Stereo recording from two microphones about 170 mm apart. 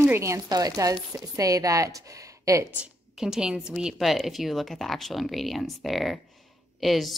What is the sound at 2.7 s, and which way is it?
A woman's voice, 5° right (ahead or behind).